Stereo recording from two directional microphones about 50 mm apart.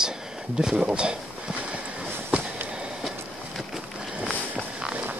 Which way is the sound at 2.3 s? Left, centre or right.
Centre.